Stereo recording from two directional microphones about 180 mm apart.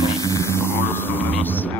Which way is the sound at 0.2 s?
15° left (ahead or behind).